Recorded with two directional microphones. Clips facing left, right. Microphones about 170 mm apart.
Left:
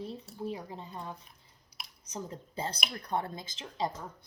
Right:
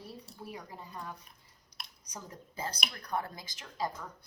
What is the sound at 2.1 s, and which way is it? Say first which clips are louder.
A woman's voice: left 7 dB; 25° left (ahead or behind).